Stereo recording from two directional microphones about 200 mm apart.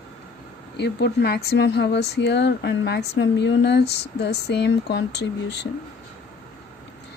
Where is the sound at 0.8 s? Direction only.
55° left (ahead or behind).